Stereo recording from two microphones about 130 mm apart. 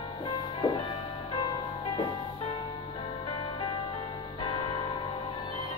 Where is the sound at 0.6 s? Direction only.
45° left (ahead or behind).